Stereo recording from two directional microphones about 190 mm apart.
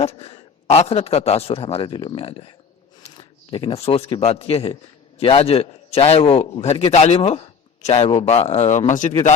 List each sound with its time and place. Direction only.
0.0 s a man's voice: 30° left (ahead or behind)